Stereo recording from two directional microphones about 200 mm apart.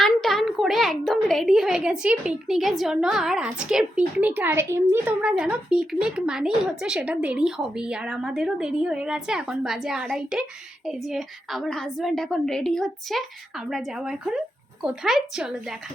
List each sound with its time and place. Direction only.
0.0 s a child's voice: centre (ahead or behind)